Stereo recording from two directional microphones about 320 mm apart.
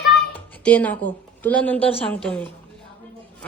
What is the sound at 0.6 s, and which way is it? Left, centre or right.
A woman's voice, centre.